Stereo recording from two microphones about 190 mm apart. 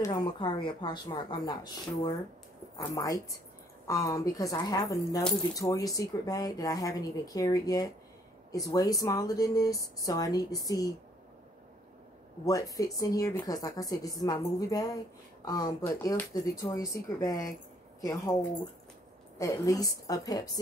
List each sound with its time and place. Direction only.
0.0 s a woman's voice: 25° left (ahead or behind)
12.4 s a woman's voice: 20° left (ahead or behind)
19.3 s a woman's voice: 15° left (ahead or behind)